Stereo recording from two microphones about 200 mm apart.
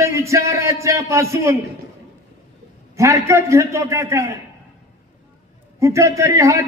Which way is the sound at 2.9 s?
15° right (ahead or behind).